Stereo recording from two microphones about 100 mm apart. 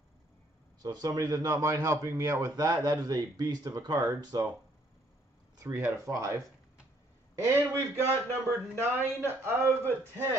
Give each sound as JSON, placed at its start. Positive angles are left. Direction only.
{"t": 0.8, "sound": "a man's voice", "side_deg": -40}
{"t": 5.6, "sound": "a man's voice", "side_deg": -25}